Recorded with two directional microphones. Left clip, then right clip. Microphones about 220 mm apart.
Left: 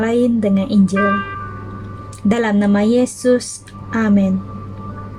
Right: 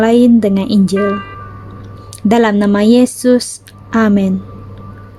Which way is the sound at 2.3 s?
45° right (ahead or behind).